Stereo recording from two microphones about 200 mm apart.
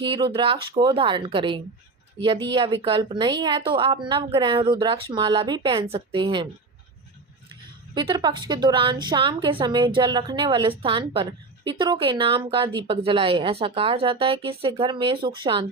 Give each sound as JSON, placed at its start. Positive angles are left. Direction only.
{"t": 0.0, "sound": "a woman's voice", "side_deg": -25}
{"t": 7.9, "sound": "a woman's voice", "side_deg": -20}